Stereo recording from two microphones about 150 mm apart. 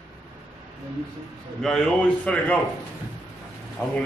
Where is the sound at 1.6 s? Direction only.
5° left (ahead or behind).